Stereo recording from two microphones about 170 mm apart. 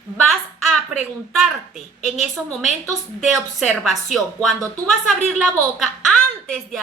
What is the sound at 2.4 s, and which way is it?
Speech, 5° right (ahead or behind).